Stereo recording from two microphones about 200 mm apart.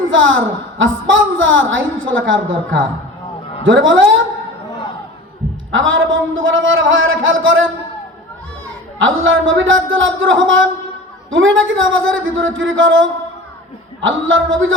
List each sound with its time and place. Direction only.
0.0 s a woman's voice: 75° right (ahead or behind)
5.7 s a woman's voice: 75° right (ahead or behind)
9.0 s a woman's voice: 70° right (ahead or behind)